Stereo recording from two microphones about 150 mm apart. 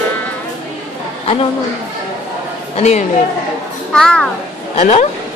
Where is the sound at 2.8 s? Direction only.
45° left (ahead or behind).